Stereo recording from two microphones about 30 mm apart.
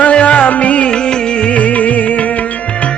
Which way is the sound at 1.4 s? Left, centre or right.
Left.